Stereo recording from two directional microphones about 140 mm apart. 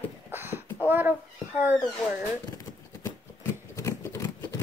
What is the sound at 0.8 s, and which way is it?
Speech, 15° right (ahead or behind).